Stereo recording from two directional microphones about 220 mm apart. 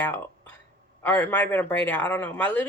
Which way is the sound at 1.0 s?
10° left (ahead or behind).